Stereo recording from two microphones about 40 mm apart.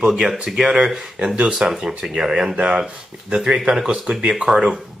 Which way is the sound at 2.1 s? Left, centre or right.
Centre.